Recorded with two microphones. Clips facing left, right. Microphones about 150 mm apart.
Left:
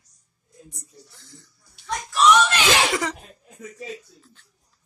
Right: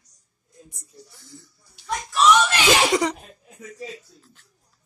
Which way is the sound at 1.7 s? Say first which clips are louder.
Right 1 dB; centre (ahead or behind).